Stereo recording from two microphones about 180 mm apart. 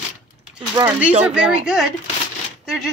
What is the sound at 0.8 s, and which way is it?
Speech, 20° right (ahead or behind).